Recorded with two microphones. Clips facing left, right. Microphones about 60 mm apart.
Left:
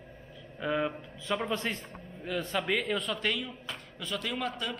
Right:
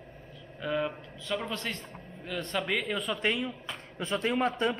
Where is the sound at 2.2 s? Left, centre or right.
Centre.